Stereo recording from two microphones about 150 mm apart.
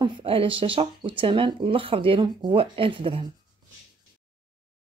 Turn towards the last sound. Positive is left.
turn(degrees=-35)  # may be behind; listen again after turning